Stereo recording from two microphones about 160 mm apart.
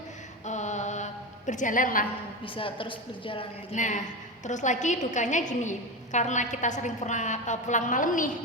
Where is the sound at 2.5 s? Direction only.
35° left (ahead or behind).